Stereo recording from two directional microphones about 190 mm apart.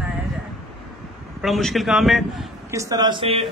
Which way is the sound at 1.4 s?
Centre (ahead or behind).